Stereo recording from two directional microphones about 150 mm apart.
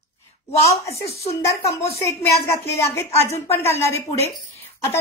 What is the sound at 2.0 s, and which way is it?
Speech, 20° left (ahead or behind).